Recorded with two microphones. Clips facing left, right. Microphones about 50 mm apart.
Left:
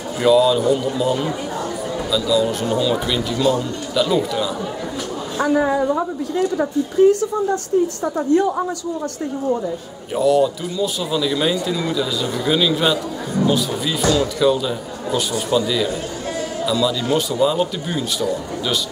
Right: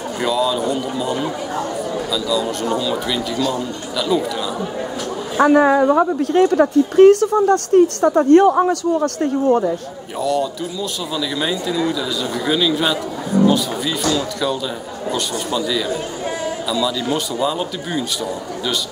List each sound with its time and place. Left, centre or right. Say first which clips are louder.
0.2 s speech: left 5 dB; centre
5.4 s a woman's voice: right 5 dB; right
10.1 s speech: left 4 dB; centre